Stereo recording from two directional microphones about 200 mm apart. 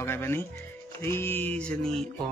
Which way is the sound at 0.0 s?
10° left (ahead or behind).